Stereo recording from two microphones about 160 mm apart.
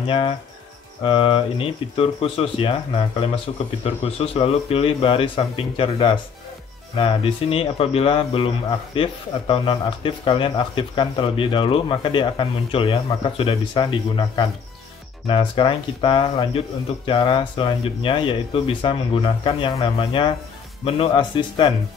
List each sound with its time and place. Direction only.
0.0 s speech: 35° left (ahead or behind)